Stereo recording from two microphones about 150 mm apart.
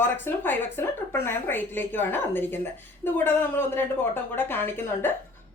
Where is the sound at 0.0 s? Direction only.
15° left (ahead or behind).